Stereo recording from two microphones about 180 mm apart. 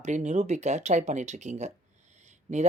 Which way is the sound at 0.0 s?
40° right (ahead or behind).